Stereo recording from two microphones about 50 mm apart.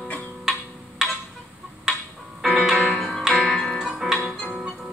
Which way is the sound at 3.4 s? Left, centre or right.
Left.